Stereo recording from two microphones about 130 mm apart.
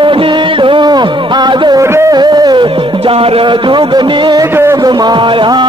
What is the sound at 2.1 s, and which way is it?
Music, 35° right (ahead or behind).